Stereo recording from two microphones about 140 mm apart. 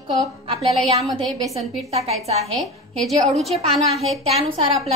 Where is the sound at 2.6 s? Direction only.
Centre (ahead or behind).